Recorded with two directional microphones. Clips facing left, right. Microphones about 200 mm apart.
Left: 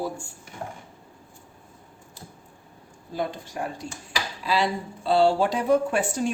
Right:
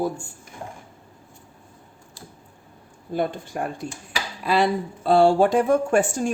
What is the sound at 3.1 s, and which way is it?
Speech, 55° right (ahead or behind).